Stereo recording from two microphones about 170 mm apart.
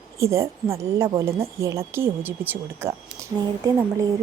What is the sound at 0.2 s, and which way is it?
A woman's voice, 15° right (ahead or behind).